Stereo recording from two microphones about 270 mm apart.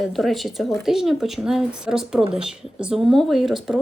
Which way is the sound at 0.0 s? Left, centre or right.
Centre.